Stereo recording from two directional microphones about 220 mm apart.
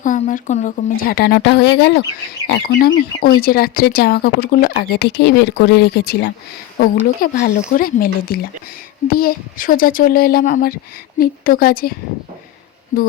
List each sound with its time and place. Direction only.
0.0 s a woman's voice: 35° left (ahead or behind)